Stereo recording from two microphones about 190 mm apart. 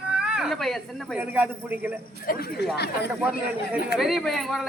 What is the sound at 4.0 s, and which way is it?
Speech, centre (ahead or behind).